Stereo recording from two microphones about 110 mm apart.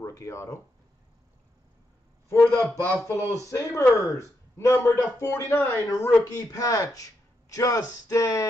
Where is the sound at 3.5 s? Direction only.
25° left (ahead or behind).